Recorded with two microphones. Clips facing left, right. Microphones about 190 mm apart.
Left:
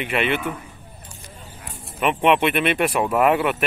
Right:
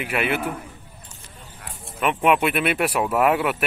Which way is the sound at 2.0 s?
Centre (ahead or behind).